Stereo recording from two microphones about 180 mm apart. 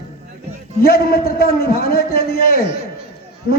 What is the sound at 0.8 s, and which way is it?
A man's voice, 55° left (ahead or behind).